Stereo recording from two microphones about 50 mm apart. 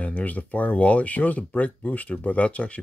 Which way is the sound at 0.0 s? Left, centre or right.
Left.